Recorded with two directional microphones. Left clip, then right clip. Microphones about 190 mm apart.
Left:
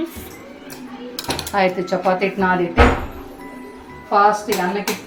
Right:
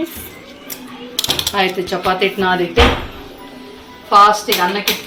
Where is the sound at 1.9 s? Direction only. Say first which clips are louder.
Right 1 dB; 20° left (ahead or behind).